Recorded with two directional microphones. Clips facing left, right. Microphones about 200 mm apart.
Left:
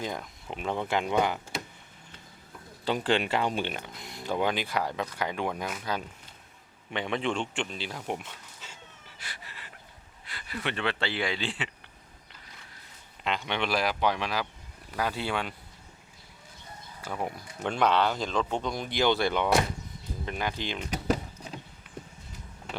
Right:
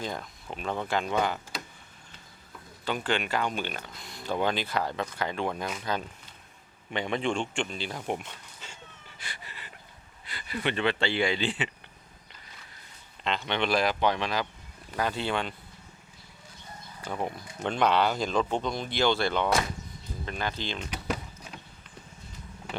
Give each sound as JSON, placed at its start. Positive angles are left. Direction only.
{"t": 0.0, "sound": "speech", "side_deg": 15}
{"t": 2.8, "sound": "speech", "side_deg": 30}
{"t": 13.2, "sound": "speech", "side_deg": 10}
{"t": 17.0, "sound": "speech", "side_deg": 5}
{"t": 17.8, "sound": "speech", "side_deg": -5}
{"t": 18.6, "sound": "speech", "side_deg": 10}
{"t": 20.9, "sound": "power windows", "side_deg": 40}